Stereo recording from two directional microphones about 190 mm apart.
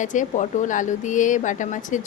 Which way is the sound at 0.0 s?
40° left (ahead or behind).